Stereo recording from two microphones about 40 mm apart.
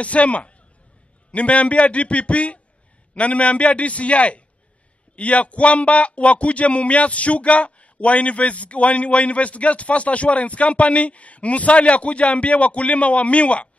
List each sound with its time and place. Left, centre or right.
0.0 s a man's voice: left